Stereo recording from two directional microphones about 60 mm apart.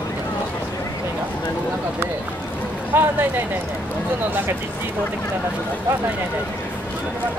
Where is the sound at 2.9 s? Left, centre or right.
Right.